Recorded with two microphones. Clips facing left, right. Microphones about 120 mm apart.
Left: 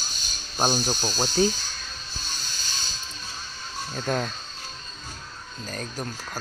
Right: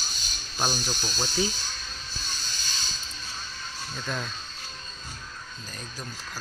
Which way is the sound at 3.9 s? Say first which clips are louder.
Left 7 dB; 50° left (ahead or behind).